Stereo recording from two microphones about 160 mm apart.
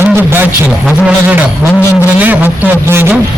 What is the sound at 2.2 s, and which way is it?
Speech, 10° right (ahead or behind).